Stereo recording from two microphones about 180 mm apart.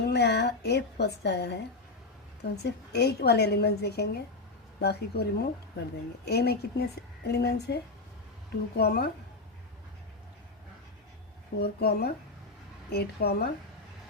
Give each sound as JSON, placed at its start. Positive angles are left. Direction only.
{"t": 0.0, "sound": "a woman's voice", "side_deg": 70}
{"t": 11.6, "sound": "a woman's voice", "side_deg": 60}